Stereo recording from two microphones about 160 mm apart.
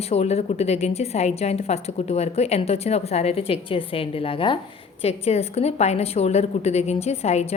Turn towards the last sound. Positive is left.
turn(degrees=45)  # may be behind; listen again after turning